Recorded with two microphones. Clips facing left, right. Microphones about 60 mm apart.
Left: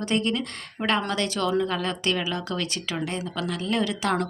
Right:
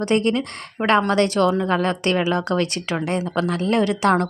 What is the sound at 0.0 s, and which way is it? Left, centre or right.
A woman's voice, right.